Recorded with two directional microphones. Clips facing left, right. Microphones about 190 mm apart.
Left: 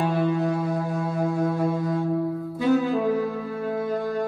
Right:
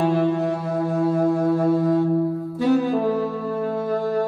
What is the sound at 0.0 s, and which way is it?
Music, 40° right (ahead or behind).